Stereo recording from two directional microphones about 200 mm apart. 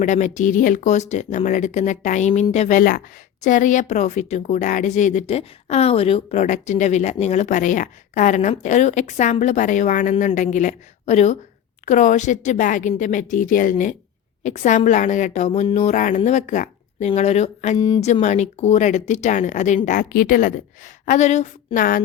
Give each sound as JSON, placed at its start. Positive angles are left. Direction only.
{"t": 0.0, "sound": "speech", "side_deg": 40}
{"t": 17.7, "sound": "speech", "side_deg": 20}
{"t": 18.0, "sound": "speech", "side_deg": 35}